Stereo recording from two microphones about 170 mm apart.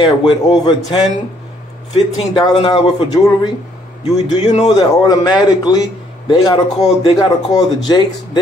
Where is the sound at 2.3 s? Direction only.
30° left (ahead or behind).